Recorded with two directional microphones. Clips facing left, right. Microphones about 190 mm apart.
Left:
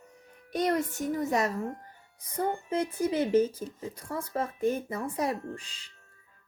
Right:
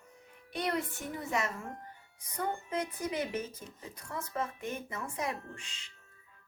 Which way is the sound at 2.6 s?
30° left (ahead or behind).